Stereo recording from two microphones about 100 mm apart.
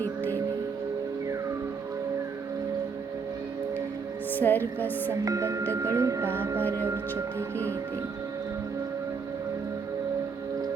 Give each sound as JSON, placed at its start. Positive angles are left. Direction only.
{"t": 4.4, "sound": "a woman's voice", "side_deg": 20}
{"t": 5.2, "sound": "speech", "side_deg": -35}
{"t": 6.2, "sound": "speech", "side_deg": -20}